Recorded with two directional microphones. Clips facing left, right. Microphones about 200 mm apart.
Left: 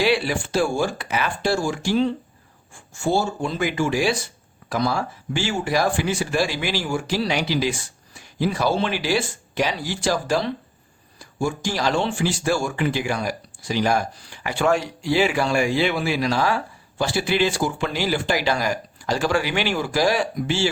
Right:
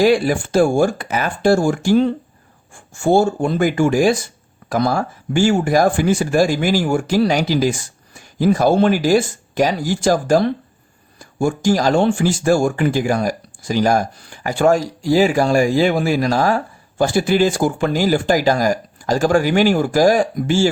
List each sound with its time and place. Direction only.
0.0 s speech: 45° right (ahead or behind)